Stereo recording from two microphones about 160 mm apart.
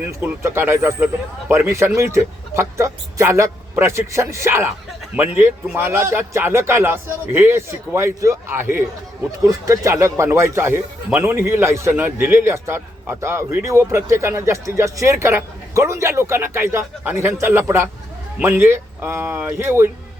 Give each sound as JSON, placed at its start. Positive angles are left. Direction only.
{"t": 0.2, "sound": "speech", "side_deg": -15}